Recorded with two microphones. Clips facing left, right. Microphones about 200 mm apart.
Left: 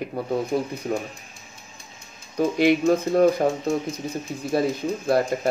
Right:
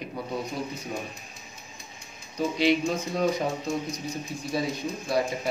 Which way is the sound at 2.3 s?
55° left (ahead or behind).